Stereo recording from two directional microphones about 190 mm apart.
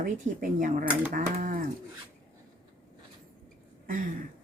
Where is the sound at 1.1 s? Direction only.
45° right (ahead or behind).